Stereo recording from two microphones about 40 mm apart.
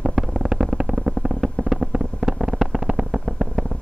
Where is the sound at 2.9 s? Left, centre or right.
Right.